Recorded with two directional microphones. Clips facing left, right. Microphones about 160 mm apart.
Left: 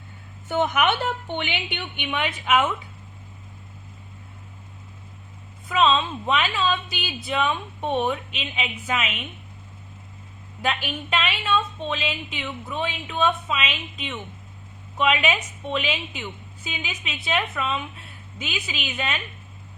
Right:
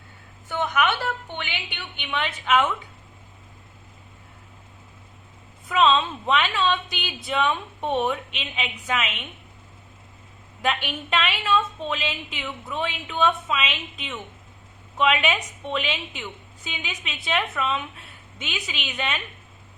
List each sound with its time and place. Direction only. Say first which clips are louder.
0.4 s a woman's voice: left 2 dB; 20° left (ahead or behind)
5.6 s a woman's voice: right 1 dB; centre (ahead or behind)
10.6 s a woman's voice: right 1 dB; centre (ahead or behind)